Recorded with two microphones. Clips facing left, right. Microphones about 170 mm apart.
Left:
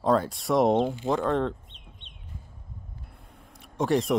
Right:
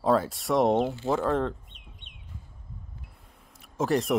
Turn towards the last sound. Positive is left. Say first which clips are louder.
# left 1 dB
turn(degrees=0)  # may be behind; listen again after turning